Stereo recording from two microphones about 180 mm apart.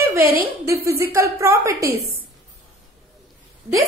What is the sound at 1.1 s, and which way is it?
Speech, 15° right (ahead or behind).